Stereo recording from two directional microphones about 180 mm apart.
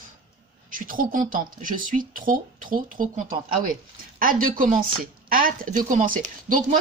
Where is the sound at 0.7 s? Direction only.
50° right (ahead or behind).